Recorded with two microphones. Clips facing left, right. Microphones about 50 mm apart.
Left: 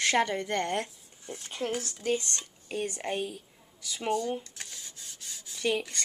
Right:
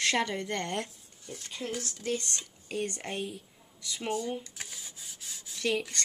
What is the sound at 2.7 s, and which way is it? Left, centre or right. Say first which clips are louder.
Speech: left 2 dB; centre.